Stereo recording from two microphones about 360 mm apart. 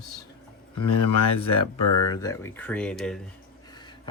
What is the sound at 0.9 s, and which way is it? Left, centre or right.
Speech, left.